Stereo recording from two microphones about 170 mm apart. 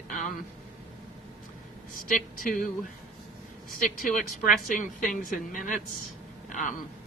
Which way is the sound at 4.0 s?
55° left (ahead or behind).